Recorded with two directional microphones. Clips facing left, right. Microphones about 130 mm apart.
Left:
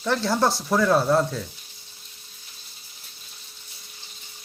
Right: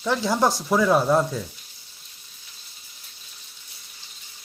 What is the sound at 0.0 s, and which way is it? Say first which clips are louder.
Speech: right 1 dB; 10° right (ahead or behind).